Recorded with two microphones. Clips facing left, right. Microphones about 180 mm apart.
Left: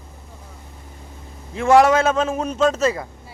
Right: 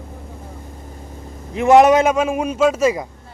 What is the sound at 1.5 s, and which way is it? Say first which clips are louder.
A man's voice: right 3 dB; 20° right (ahead or behind).